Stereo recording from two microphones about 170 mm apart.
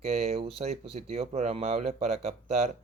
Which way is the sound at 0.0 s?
40° right (ahead or behind).